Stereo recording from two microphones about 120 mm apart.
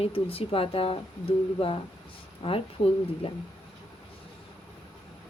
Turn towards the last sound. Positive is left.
turn(degrees=50)  # may be behind; listen again after turning